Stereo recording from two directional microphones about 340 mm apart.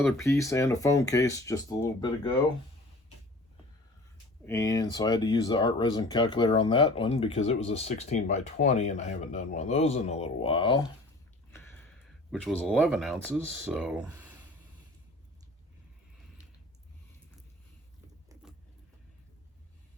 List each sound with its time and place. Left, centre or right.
0.0 s speech: centre
4.4 s speech: centre
11.5 s speech: centre